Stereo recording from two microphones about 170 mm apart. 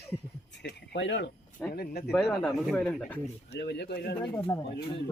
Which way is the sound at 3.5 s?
80° left.